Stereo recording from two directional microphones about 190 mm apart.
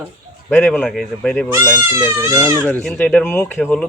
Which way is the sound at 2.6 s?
5° left (ahead or behind).